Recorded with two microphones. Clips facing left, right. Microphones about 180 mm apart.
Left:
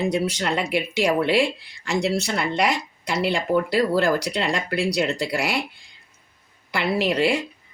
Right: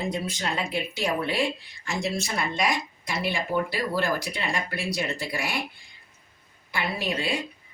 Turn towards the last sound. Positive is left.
turn(degrees=70)  # may be behind; listen again after turning